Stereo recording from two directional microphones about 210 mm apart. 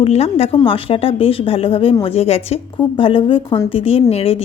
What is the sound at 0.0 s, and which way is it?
Speech, 30° left (ahead or behind).